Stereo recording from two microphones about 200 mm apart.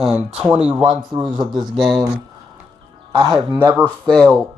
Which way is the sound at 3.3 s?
10° right (ahead or behind).